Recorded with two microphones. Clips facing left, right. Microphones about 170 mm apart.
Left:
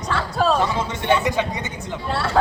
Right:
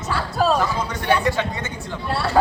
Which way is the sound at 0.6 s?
25° left (ahead or behind).